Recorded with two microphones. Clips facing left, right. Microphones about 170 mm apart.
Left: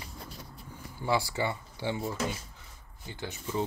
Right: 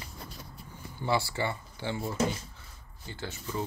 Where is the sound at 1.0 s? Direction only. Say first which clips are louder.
Even; 15° left (ahead or behind).